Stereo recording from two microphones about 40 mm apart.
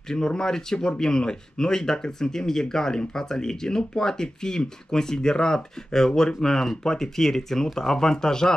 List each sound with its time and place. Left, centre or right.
0.1 s speech: centre